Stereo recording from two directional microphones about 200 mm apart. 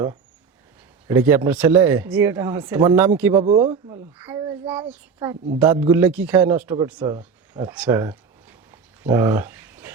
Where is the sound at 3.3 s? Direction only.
30° right (ahead or behind).